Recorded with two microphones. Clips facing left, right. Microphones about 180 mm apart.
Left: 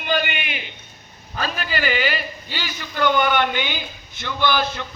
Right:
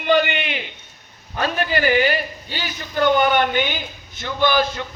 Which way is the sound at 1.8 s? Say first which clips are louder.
Right 5 dB; 50° right (ahead or behind).